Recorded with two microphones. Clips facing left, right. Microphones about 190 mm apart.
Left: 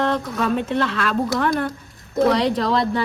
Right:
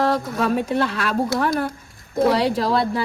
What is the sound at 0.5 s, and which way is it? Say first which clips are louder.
A woman's voice: even; 5° right (ahead or behind).